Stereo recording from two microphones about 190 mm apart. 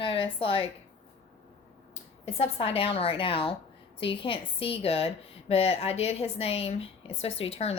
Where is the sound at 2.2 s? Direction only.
30° left (ahead or behind).